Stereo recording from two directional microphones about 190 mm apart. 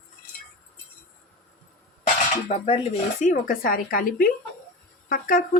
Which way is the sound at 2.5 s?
35° left (ahead or behind).